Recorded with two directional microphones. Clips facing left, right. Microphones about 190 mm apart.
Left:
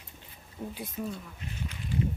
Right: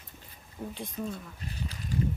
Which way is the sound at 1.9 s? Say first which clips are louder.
Even; 40° right (ahead or behind).